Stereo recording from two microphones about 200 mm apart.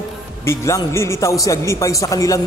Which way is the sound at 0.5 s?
15° left (ahead or behind).